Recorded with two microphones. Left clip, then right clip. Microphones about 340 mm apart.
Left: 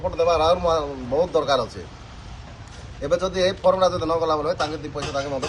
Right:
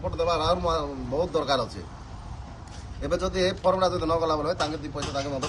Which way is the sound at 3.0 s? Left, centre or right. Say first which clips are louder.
Left 5 dB; centre.